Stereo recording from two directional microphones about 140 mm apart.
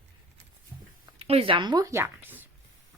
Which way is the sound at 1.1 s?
45° right (ahead or behind).